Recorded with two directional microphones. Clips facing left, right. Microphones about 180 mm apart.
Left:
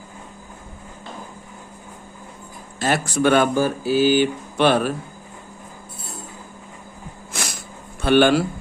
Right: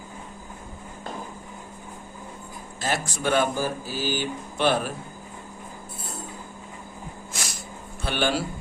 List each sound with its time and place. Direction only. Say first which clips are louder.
2.7 s speech: left 7 dB; 65° left (ahead or behind)
8.0 s speech: left 10 dB; 65° left (ahead or behind)